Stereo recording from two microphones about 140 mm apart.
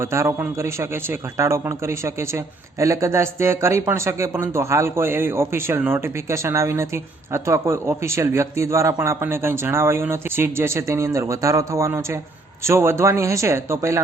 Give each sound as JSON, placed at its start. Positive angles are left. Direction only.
{"t": 0.0, "sound": "speech", "side_deg": -20}